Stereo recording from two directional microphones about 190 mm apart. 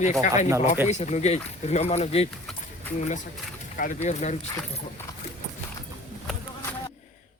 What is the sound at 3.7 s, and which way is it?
Speech, 40° left (ahead or behind).